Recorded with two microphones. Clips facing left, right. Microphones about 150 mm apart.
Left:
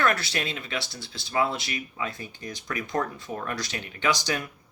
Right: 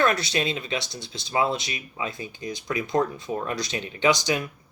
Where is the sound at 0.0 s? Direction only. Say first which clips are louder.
Right 3 dB; 20° right (ahead or behind).